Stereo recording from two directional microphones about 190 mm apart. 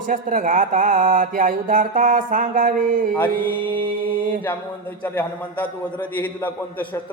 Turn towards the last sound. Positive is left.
turn(degrees=10)  # may be behind; listen again after turning